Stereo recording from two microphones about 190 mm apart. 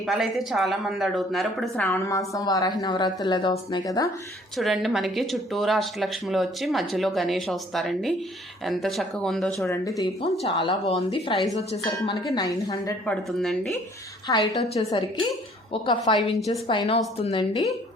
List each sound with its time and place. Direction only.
0.0 s a woman's voice: centre (ahead or behind); by 4.1 s 20° left (ahead or behind)
4.5 s speech: centre (ahead or behind)
9.6 s speech: 15° left (ahead or behind)
10.4 s a woman's voice: 30° left (ahead or behind)
13.1 s speech: centre (ahead or behind)
14.3 s a woman's voice: 20° left (ahead or behind)
14.7 s a woman's voice: 30° left (ahead or behind)
16.1 s speech: centre (ahead or behind)
16.5 s a woman's voice: 25° left (ahead or behind)